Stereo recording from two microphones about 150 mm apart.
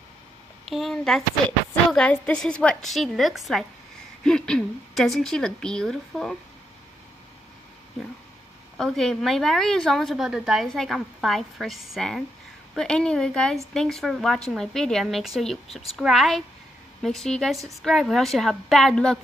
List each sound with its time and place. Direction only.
0.7 s a woman's voice: centre (ahead or behind)
8.7 s a woman's voice: centre (ahead or behind)